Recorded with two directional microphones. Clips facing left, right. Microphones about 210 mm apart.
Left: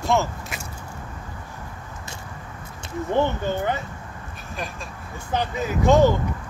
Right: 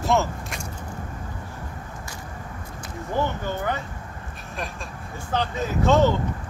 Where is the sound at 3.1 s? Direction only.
25° left (ahead or behind).